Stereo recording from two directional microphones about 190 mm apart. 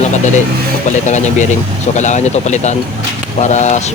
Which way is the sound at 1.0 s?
40° left (ahead or behind).